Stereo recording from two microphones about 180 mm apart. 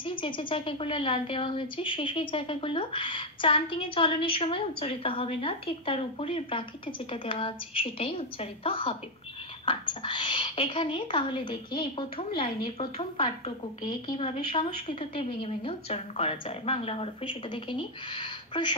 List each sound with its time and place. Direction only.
0.0 s a woman's voice: 30° left (ahead or behind)